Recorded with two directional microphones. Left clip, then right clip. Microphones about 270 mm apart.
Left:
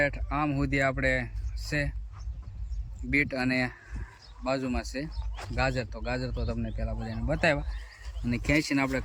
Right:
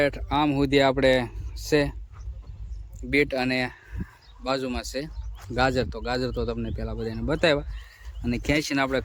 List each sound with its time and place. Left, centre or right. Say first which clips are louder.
0.0 s speech: right 5 dB; centre
3.1 s speech: right 4 dB; centre
8.3 s speech: right 3 dB; right
8.5 s speech: right 2 dB; centre